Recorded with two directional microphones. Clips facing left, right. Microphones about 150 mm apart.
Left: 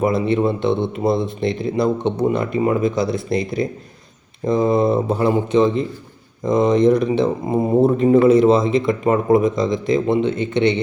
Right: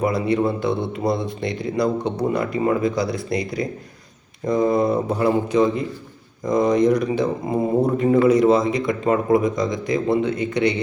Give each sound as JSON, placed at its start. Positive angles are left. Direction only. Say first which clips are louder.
{"t": 0.0, "sound": "speech", "louder": "left 2 dB", "side_deg": 25}